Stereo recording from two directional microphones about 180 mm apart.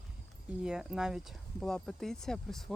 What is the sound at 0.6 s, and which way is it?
Speech, 5° right (ahead or behind).